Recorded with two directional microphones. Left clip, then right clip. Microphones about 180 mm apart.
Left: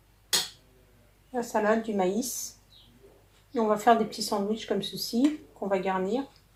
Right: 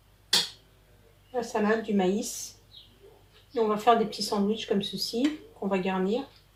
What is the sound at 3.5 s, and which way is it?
Speech, 30° left (ahead or behind).